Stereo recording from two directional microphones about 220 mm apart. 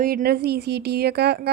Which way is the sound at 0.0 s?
40° right (ahead or behind).